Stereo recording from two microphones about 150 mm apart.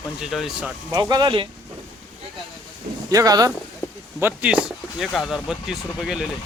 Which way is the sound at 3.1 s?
25° right (ahead or behind).